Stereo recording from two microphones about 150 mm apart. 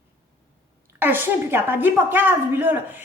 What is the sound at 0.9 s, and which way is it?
A woman's voice, 15° right (ahead or behind).